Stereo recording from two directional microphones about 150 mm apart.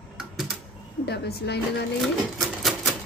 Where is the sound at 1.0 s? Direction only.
90° left.